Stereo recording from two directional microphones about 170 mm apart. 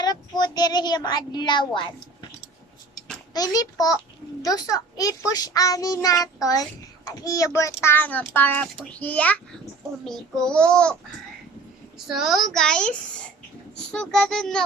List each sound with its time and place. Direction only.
0.0 s speech: 25° left (ahead or behind)
3.3 s a child's voice: 20° left (ahead or behind)
10.0 s child singing: 5° left (ahead or behind)
11.9 s child singing: centre (ahead or behind)